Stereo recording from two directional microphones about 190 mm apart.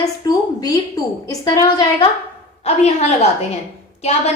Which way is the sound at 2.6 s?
35° left (ahead or behind).